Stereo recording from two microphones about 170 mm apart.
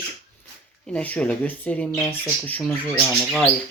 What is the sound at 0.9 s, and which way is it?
Speech, 10° left (ahead or behind).